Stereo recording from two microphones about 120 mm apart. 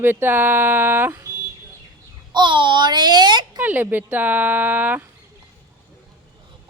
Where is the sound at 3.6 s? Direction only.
15° right (ahead or behind).